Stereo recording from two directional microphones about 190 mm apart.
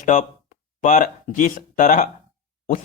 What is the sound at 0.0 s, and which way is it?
Speech, 40° left (ahead or behind).